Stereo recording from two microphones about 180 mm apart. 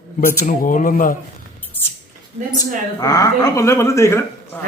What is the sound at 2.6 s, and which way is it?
Speech, 20° left (ahead or behind).